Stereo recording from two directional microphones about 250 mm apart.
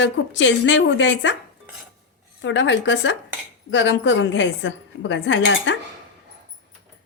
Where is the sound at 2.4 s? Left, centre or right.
Left.